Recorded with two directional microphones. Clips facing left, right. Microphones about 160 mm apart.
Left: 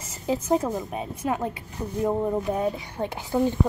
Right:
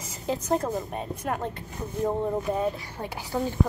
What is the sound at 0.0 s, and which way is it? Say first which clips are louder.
A woman's voice: left 3 dB; centre (ahead or behind).